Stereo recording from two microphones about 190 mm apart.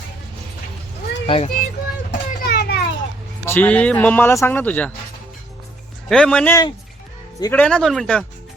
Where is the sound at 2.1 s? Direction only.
60° left (ahead or behind).